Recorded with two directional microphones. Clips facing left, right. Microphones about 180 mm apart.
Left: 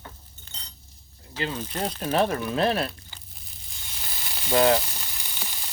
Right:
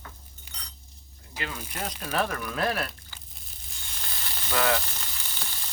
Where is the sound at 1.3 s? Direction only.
30° left (ahead or behind).